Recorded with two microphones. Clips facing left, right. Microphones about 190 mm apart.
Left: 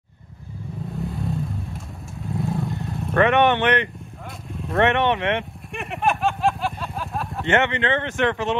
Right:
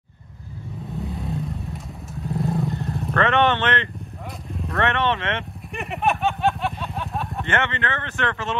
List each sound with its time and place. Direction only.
0.9 s vehicle: centre (ahead or behind)
3.2 s speech: 15° left (ahead or behind)
4.5 s vehicle: centre (ahead or behind)
4.7 s speech: 15° left (ahead or behind)
5.8 s a sound: centre (ahead or behind)
7.4 s speech: 20° left (ahead or behind)